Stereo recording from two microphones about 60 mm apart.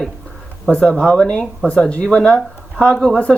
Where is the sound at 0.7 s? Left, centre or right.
Left.